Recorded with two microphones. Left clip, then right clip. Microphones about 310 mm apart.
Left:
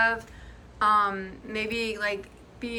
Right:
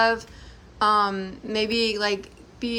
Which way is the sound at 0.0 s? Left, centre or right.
Centre.